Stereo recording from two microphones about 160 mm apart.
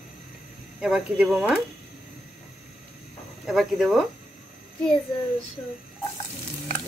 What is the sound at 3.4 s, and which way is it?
Speech, centre (ahead or behind).